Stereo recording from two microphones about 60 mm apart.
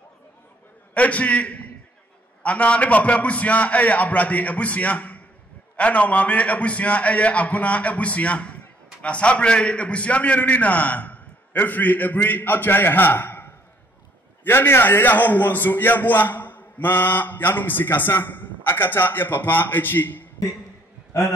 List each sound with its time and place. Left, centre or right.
0.9 s a man's voice: left